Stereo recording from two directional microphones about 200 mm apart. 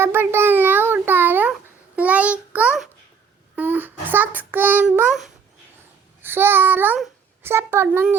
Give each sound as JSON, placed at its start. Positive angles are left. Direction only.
{"t": 0.0, "sound": "a sound", "side_deg": -10}
{"t": 3.5, "sound": "child singing", "side_deg": -10}
{"t": 6.2, "sound": "a child's voice", "side_deg": -10}